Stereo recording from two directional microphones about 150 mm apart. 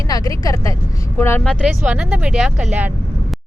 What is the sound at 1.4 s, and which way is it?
Speech, 5° left (ahead or behind).